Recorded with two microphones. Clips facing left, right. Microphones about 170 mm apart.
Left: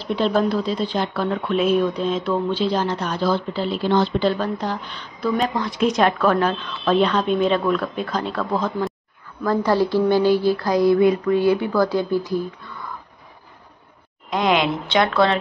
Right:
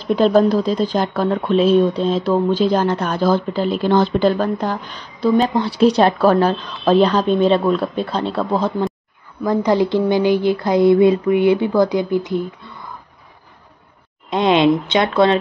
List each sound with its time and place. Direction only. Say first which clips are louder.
0.0 s speech: right 6 dB; 45° right (ahead or behind)
5.2 s speech: right 6 dB; 30° right (ahead or behind)
9.4 s speech: right 3 dB; 15° right (ahead or behind)
14.3 s speech: right 5 dB; 25° right (ahead or behind)